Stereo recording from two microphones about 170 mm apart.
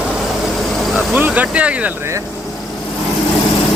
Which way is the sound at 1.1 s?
10° right (ahead or behind).